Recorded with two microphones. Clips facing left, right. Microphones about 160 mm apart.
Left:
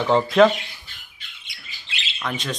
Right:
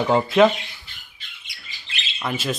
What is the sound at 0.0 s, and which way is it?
Speech, 5° right (ahead or behind).